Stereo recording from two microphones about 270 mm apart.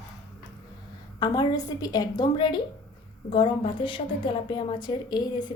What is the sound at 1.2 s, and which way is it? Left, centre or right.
A woman's voice, centre.